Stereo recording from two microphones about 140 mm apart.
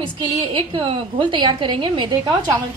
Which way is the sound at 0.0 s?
35° right (ahead or behind).